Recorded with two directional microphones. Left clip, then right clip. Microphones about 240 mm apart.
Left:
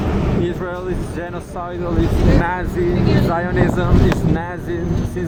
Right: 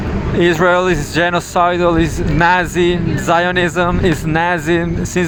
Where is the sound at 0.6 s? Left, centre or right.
Right.